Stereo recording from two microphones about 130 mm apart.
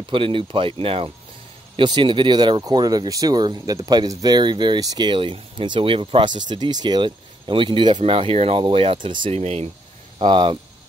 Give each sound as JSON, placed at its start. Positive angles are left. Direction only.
{"t": 0.1, "sound": "speech", "side_deg": -40}
{"t": 9.3, "sound": "speech", "side_deg": -55}
{"t": 10.1, "sound": "speech", "side_deg": -40}